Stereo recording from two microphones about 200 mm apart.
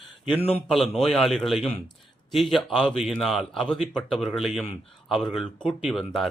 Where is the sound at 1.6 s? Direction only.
30° left (ahead or behind).